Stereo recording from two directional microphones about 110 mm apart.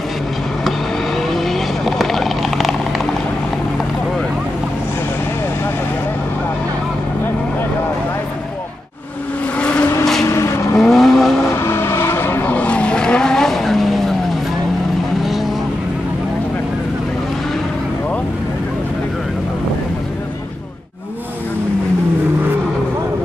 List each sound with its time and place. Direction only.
0.7 s vehicle: centre (ahead or behind)
9.6 s vehicle: 10° left (ahead or behind)
10.2 s vehicle: 25° left (ahead or behind)
10.8 s vehicle: centre (ahead or behind)
11.6 s vehicle: 20° left (ahead or behind); by 14.1 s centre (ahead or behind)